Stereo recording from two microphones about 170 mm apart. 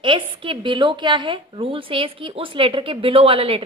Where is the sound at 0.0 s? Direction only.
30° right (ahead or behind).